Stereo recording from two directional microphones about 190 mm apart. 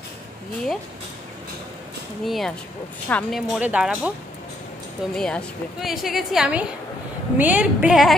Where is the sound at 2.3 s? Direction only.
Centre (ahead or behind).